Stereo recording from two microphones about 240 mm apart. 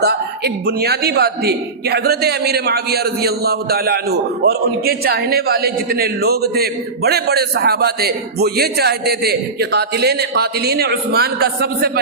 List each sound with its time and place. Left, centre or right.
0.0 s a man's voice: right